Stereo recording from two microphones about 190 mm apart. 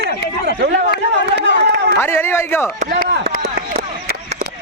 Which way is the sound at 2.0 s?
10° left (ahead or behind).